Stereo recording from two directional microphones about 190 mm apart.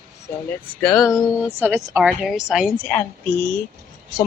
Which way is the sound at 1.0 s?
15° left (ahead or behind).